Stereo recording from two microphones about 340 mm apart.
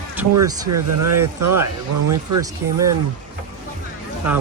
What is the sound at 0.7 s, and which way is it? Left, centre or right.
Speech, right.